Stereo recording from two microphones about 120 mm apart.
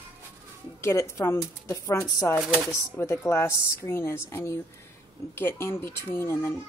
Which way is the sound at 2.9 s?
25° left (ahead or behind).